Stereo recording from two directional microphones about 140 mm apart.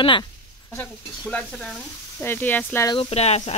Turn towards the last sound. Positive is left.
turn(degrees=50)  # may be behind; listen again after turning